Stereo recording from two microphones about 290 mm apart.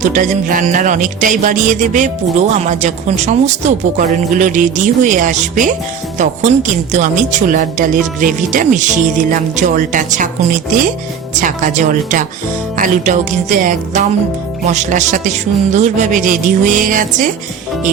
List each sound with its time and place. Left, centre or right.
0.0 s speech: right